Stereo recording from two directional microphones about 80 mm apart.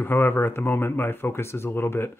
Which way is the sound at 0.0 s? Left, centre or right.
Left.